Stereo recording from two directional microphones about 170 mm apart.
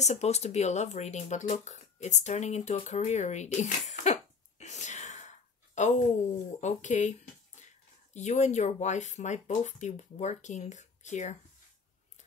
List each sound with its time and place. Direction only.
0.0 s speech: 40° left (ahead or behind)